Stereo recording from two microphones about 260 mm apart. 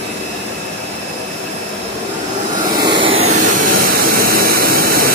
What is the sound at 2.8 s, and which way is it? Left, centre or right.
Vehicle, centre.